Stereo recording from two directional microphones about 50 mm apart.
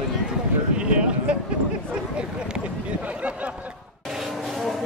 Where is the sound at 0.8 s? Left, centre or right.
Right.